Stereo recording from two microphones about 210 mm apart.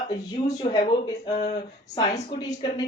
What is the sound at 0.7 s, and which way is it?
Speech, 20° left (ahead or behind).